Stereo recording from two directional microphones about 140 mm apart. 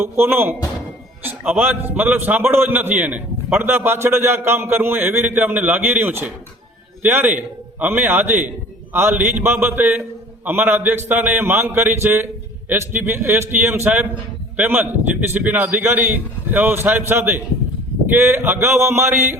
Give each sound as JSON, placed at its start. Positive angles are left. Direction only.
{"t": 0.0, "sound": "a man's voice", "side_deg": -15}